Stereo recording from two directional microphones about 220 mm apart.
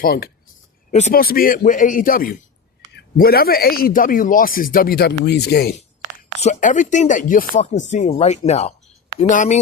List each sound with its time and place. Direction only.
0.0 s a man's voice: 45° left (ahead or behind)
6.4 s a man's voice: 35° left (ahead or behind)